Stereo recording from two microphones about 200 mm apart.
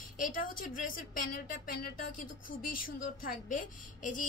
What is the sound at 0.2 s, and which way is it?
Speech, 45° left (ahead or behind).